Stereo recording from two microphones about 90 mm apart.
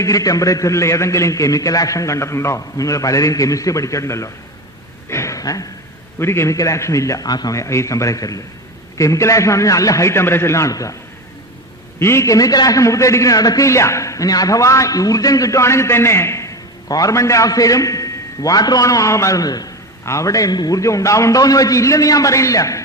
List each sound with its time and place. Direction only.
0.0 s a man's voice: 40° left (ahead or behind)
5.0 s a sound: 30° left (ahead or behind)
6.1 s a man's voice: 30° left (ahead or behind)
11.9 s a man's voice: 30° left (ahead or behind)